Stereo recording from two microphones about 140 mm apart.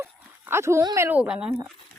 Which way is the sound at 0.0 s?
20° right (ahead or behind).